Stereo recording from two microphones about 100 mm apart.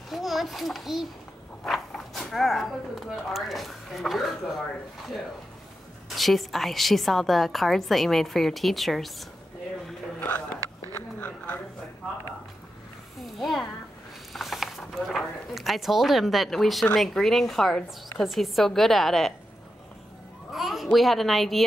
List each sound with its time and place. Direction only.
0.1 s a child's voice: centre (ahead or behind)
1.6 s zipper: centre (ahead or behind)
3.3 s a woman's voice: centre (ahead or behind)
6.0 s a woman's voice: centre (ahead or behind)
10.2 s a sound: 20° left (ahead or behind)
13.2 s a woman's voice: centre (ahead or behind)
20.5 s a woman's voice: centre (ahead or behind)